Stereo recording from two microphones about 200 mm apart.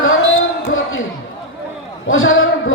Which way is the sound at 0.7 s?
90° left.